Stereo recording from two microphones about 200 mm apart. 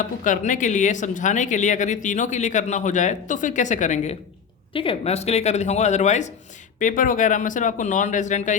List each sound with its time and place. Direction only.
0.0 s speech: 40° left (ahead or behind)
4.7 s speech: 25° left (ahead or behind)